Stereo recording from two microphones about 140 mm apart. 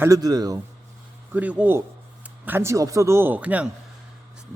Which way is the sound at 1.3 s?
10° right (ahead or behind).